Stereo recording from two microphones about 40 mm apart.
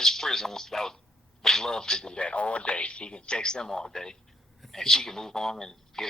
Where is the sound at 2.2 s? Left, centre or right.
Left; by 6.0 s centre.